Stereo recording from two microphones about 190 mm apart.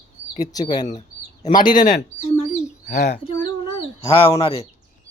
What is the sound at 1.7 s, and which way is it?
Bird, 45° left (ahead or behind).